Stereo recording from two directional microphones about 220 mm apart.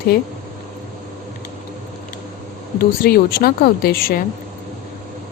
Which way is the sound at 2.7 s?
45° left (ahead or behind).